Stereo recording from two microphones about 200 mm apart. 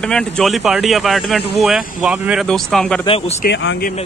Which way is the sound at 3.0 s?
30° left (ahead or behind).